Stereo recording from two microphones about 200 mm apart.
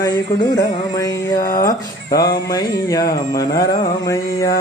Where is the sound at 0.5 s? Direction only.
20° left (ahead or behind).